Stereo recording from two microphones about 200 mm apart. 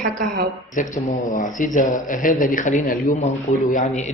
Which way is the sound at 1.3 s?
40° left (ahead or behind).